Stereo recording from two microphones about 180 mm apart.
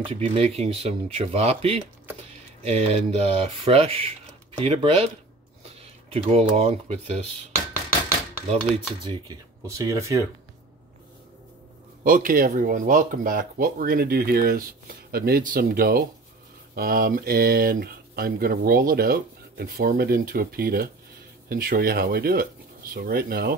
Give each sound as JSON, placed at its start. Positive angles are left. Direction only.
{"t": 0.1, "sound": "speech", "side_deg": -35}
{"t": 5.8, "sound": "a sound", "side_deg": -35}
{"t": 6.5, "sound": "speech", "side_deg": -35}
{"t": 9.0, "sound": "speech", "side_deg": -25}
{"t": 12.0, "sound": "speech", "side_deg": -50}